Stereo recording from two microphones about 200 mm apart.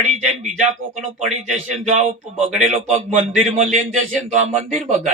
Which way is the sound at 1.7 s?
35° right (ahead or behind).